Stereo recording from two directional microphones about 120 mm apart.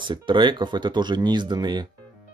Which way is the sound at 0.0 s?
40° right (ahead or behind).